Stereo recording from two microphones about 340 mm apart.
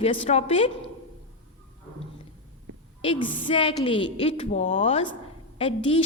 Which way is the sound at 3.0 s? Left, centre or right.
Centre.